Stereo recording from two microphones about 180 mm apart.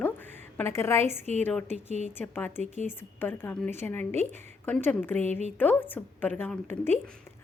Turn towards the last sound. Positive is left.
turn(degrees=10)  # may be behind; listen again after turning